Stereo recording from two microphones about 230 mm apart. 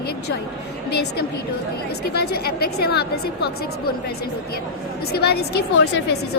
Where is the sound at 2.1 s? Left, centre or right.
Left.